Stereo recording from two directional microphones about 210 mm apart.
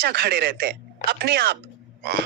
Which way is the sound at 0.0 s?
50° right (ahead or behind).